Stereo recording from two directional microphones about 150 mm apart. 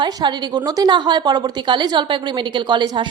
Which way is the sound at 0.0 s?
30° right (ahead or behind).